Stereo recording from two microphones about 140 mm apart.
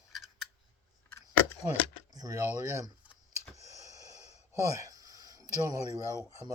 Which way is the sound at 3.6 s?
20° right (ahead or behind).